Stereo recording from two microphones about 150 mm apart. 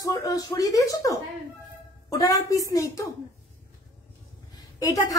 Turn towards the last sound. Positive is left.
turn(degrees=25)  # may be behind; listen again after turning